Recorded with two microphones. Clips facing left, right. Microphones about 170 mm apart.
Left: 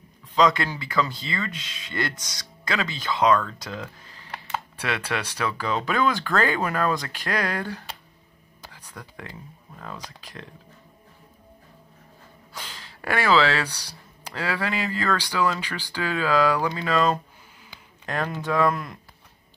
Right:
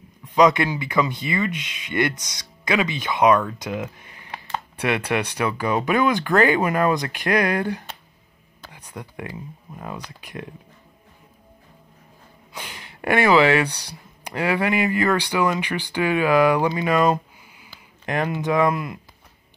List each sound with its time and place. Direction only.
0.4 s speech: 15° right (ahead or behind)
8.7 s a sound: 20° right (ahead or behind)
12.5 s speech: 15° right (ahead or behind)